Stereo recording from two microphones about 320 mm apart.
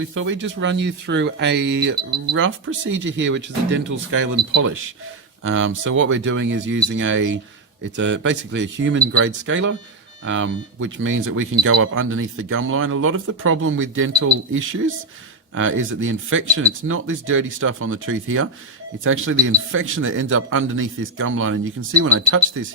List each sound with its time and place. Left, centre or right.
0.1 s speech: right
2.1 s speech: right